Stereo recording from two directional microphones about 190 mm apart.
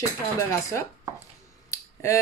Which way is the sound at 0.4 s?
15° left (ahead or behind).